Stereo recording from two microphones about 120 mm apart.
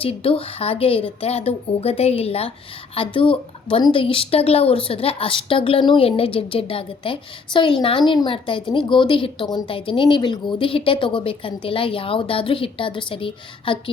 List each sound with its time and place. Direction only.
0.0 s a woman's voice: 50° left (ahead or behind)